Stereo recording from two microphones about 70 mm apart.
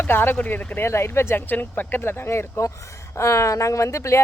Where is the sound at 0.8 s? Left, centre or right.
Left.